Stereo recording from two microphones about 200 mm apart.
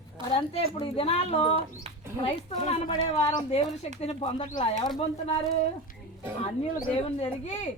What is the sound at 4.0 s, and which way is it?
Speech, 30° left (ahead or behind).